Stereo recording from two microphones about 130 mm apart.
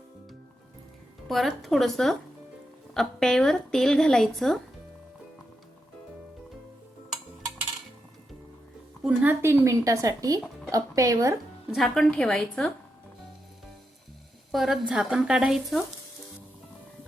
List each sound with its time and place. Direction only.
1.3 s a woman's voice: centre (ahead or behind)
9.0 s speech: 15° right (ahead or behind)
11.7 s a woman's voice: 5° left (ahead or behind)
14.5 s a woman's voice: centre (ahead or behind)